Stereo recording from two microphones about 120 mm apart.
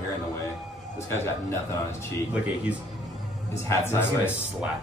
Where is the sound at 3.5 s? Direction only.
25° left (ahead or behind).